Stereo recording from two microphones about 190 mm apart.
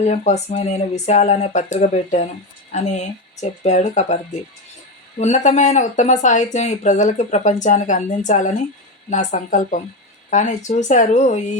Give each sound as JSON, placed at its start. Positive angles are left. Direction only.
{"t": 0.1, "sound": "speech", "side_deg": 35}